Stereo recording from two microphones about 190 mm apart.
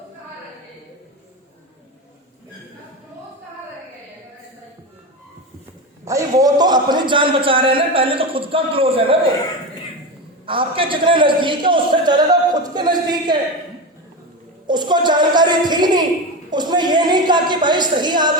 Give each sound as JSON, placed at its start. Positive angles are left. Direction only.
{"t": 6.1, "sound": "a man's voice", "side_deg": -15}
{"t": 10.4, "sound": "a man's voice", "side_deg": -25}
{"t": 14.7, "sound": "a child's voice", "side_deg": -25}